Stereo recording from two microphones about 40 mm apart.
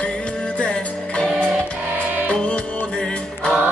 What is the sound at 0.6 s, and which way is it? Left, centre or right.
Music, left.